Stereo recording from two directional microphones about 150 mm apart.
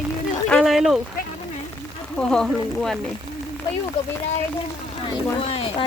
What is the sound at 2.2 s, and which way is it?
Speech, 5° left (ahead or behind).